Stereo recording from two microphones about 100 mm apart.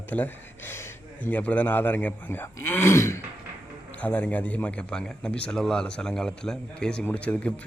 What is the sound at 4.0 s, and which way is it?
A man's voice, 15° left (ahead or behind).